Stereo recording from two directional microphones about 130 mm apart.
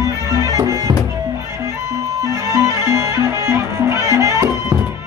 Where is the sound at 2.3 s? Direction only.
25° right (ahead or behind).